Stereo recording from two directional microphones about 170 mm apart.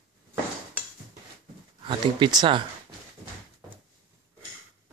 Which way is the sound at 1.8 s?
30° right (ahead or behind).